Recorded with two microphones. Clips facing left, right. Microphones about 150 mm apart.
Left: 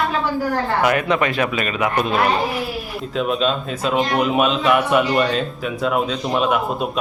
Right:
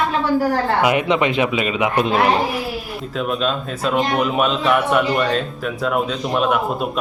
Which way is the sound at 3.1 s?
Centre (ahead or behind).